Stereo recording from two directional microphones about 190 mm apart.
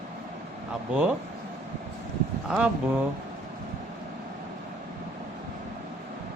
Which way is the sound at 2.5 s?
5° right (ahead or behind).